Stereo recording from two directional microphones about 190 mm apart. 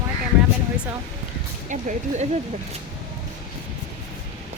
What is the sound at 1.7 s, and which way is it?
Speech, 40° right (ahead or behind).